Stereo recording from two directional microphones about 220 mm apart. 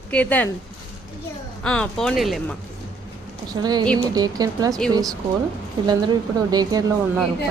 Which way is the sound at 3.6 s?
20° right (ahead or behind).